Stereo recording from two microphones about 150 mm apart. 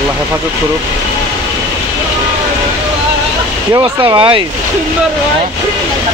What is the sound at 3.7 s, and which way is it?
Speech, 30° right (ahead or behind).